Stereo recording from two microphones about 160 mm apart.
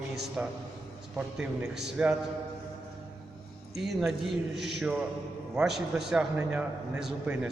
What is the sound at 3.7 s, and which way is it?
A man's voice, centre (ahead or behind).